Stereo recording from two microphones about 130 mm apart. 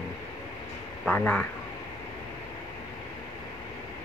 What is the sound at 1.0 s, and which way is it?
Speech, 10° left (ahead or behind).